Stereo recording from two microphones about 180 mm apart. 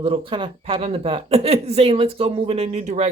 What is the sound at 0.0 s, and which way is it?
Speech, 30° right (ahead or behind).